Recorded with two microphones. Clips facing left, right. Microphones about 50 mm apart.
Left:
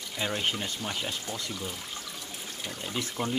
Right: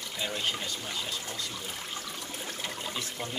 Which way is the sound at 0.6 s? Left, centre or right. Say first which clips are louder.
Left 2 dB; left.